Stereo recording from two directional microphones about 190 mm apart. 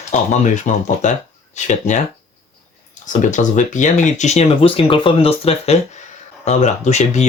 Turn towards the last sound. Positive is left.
turn(degrees=35)  # may be behind; listen again after turning